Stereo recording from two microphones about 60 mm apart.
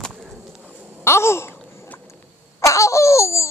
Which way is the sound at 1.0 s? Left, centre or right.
Left.